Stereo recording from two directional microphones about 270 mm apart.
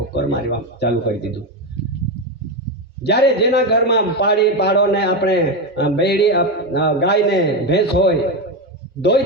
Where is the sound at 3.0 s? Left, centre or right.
Left.